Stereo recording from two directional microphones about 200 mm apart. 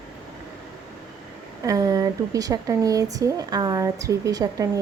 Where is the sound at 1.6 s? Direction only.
15° right (ahead or behind).